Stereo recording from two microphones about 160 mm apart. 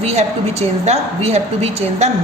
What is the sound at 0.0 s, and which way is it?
A woman's voice, 40° right (ahead or behind).